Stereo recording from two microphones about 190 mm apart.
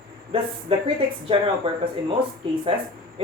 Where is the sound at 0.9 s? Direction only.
30° right (ahead or behind).